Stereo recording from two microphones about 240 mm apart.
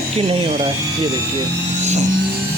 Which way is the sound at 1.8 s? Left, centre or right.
Right.